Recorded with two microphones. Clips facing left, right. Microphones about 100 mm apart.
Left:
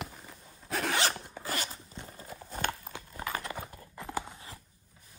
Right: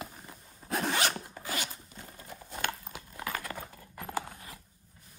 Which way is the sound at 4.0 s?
20° left (ahead or behind).